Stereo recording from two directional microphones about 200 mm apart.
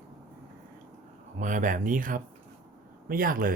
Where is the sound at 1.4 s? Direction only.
40° right (ahead or behind).